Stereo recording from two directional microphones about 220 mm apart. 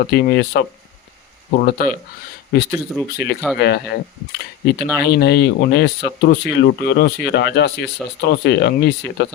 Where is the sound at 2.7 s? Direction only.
Centre (ahead or behind).